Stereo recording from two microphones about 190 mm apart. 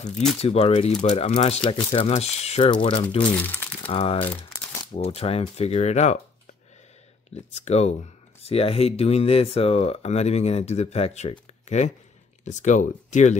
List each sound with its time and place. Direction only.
0.4 s speech: 35° left (ahead or behind)
3.3 s speech: 10° left (ahead or behind)
3.8 s speech: 30° left (ahead or behind)
7.3 s speech: 35° left (ahead or behind)